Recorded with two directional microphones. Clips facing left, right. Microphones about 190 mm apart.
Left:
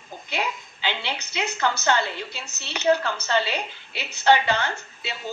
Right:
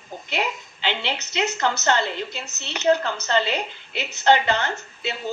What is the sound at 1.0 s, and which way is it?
Speech, 20° right (ahead or behind).